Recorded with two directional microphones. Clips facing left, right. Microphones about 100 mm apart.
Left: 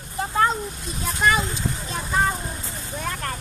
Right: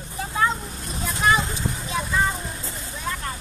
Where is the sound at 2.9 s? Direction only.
55° left (ahead or behind).